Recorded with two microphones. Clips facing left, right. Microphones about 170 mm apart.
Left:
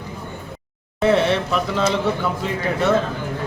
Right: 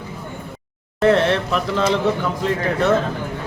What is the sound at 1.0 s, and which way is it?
Speech, centre (ahead or behind).